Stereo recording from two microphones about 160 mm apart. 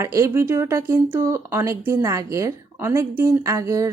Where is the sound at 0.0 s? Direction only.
20° right (ahead or behind).